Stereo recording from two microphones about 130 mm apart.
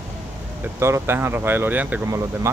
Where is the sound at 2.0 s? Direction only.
25° right (ahead or behind).